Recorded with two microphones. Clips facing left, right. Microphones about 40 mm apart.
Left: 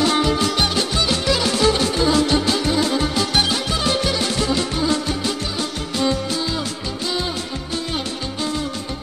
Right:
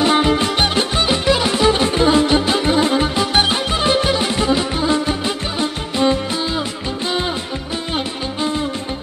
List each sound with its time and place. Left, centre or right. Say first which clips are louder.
0.0 s music: right 3 dB; right